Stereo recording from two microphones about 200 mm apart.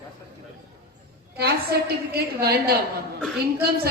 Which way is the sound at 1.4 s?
55° right (ahead or behind).